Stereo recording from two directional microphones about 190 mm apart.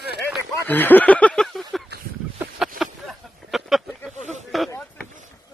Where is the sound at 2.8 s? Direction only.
Centre (ahead or behind).